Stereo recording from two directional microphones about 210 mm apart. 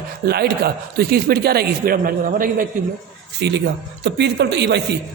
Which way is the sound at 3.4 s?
55° right (ahead or behind).